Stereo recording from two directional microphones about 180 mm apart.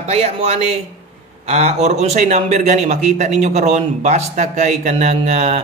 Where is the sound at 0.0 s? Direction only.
35° right (ahead or behind).